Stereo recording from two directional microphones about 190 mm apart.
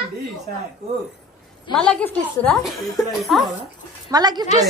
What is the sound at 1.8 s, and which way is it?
A woman's voice, 5° left (ahead or behind).